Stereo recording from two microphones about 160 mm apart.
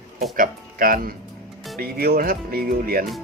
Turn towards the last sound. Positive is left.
turn(degrees=-65)  # may be behind; listen again after turning